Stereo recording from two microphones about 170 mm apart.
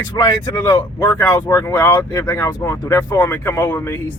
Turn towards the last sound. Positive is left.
turn(degrees=15)  # may be behind; listen again after turning